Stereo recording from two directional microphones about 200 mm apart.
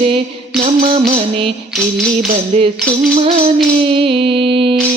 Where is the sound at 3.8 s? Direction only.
25° right (ahead or behind).